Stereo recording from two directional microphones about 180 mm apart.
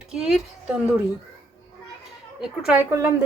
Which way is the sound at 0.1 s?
5° right (ahead or behind).